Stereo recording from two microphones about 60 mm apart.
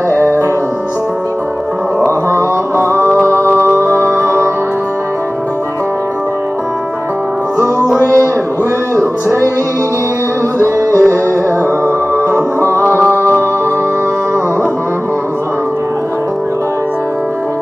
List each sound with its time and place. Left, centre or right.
0.2 s music: right
2.0 s mantra: right
3.4 s music: right
10.9 s music: left
12.2 s music: right